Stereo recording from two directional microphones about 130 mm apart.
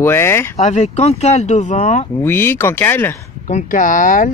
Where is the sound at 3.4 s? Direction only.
75° left (ahead or behind); by 4.3 s 90° left.